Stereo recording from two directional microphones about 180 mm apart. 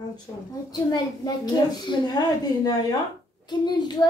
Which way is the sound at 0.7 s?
20° left (ahead or behind).